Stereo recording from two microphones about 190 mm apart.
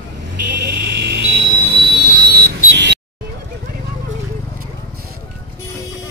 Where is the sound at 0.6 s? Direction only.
60° right (ahead or behind).